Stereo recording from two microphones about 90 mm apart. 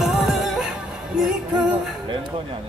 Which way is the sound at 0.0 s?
5° right (ahead or behind).